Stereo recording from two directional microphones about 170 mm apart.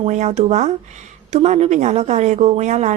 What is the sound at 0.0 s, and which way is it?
A woman's voice, 40° right (ahead or behind).